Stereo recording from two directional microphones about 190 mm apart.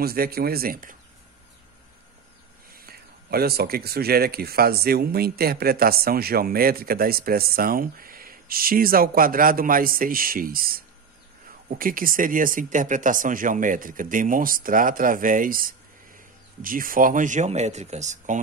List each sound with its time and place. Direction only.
0.0 s speech: 55° right (ahead or behind)
2.7 s speech: 55° right (ahead or behind)